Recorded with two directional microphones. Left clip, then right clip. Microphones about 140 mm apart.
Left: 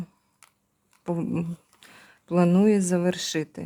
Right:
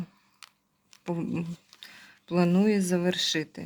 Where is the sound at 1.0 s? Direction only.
25° left (ahead or behind).